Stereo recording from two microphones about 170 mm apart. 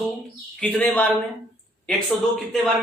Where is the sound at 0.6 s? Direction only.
10° left (ahead or behind).